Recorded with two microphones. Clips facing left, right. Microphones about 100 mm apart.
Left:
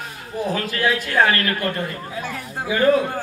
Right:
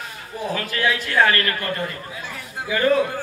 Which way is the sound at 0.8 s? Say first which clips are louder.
Even; 40° left (ahead or behind).